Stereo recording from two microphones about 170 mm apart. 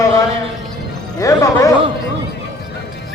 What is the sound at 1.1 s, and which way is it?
Music, 20° left (ahead or behind).